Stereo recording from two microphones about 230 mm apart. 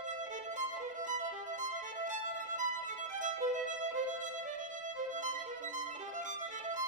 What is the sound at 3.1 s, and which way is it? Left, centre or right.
Violin, right.